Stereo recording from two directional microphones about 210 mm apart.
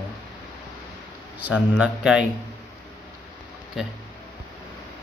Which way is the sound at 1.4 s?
5° right (ahead or behind).